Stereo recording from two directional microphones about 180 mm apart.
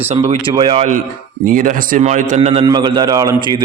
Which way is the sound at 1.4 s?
50° right (ahead or behind).